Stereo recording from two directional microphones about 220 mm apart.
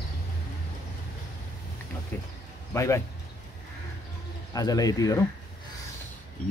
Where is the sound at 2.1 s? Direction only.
10° left (ahead or behind).